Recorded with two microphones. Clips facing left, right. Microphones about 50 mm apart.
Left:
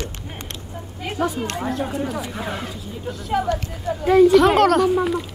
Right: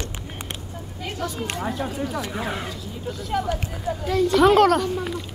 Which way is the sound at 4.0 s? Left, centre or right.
Left.